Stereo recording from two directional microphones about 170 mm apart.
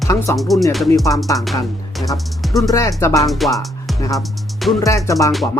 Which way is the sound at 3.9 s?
20° left (ahead or behind).